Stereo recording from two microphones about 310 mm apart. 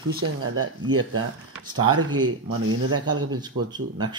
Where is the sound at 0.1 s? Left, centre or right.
Right.